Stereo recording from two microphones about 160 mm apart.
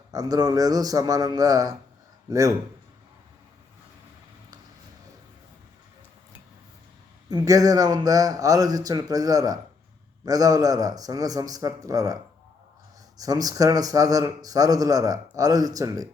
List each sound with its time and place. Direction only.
0.1 s a man's voice: 25° right (ahead or behind)
7.3 s a man's voice: 20° right (ahead or behind)
13.1 s a man's voice: 25° right (ahead or behind)